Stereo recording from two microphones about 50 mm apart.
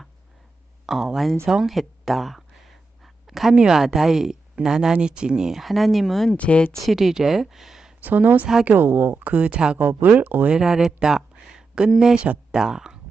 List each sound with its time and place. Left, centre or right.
0.9 s speech: centre
1.6 s a sound: centre
3.5 s speech: centre
3.8 s speech: centre
6.3 s speech: left
6.7 s speech: centre
8.0 s speech: right
8.9 s speech: right
9.3 s speech: right
9.7 s speech: right
10.5 s speech: centre